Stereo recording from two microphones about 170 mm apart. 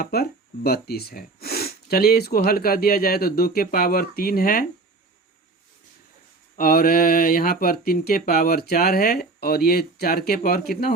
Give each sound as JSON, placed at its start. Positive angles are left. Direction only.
{"t": 0.0, "sound": "speech", "side_deg": 65}
{"t": 6.6, "sound": "speech", "side_deg": 60}